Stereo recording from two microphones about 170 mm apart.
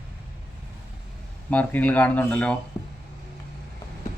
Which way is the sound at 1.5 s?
10° left (ahead or behind).